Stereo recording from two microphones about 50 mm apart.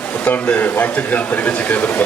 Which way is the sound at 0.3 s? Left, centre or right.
Left.